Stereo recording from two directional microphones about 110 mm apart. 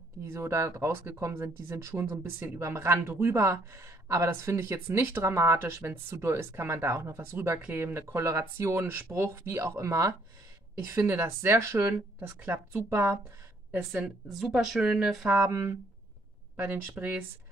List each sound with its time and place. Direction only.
0.3 s speech: 25° right (ahead or behind)
13.7 s speech: 15° right (ahead or behind)
15.2 s speech: 25° right (ahead or behind)